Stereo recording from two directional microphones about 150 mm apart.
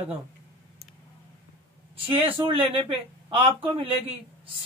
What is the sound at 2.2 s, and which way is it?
Speech, 35° right (ahead or behind).